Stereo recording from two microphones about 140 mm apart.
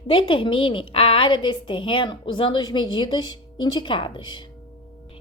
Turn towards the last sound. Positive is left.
turn(degrees=35)  # may be behind; listen again after turning